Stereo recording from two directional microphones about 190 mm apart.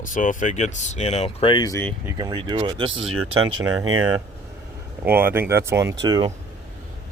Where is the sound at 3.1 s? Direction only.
90° right.